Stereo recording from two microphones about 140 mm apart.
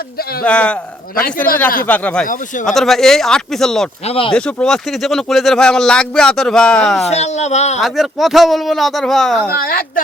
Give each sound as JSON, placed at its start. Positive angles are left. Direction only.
{"t": 0.4, "sound": "speech", "side_deg": 10}
{"t": 1.8, "sound": "speech", "side_deg": 10}
{"t": 2.2, "sound": "speech", "side_deg": 70}
{"t": 2.6, "sound": "speech", "side_deg": 0}
{"t": 4.0, "sound": "speech", "side_deg": 45}
{"t": 4.3, "sound": "speech", "side_deg": 5}
{"t": 7.1, "sound": "speech", "side_deg": 50}
{"t": 7.8, "sound": "speech", "side_deg": 0}
{"t": 9.5, "sound": "a woman's voice", "side_deg": 90}